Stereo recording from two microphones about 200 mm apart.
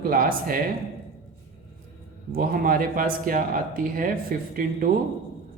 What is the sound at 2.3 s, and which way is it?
A man's voice, 45° right (ahead or behind).